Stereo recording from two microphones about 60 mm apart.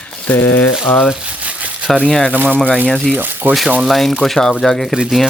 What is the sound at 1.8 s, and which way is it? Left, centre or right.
Speech, centre.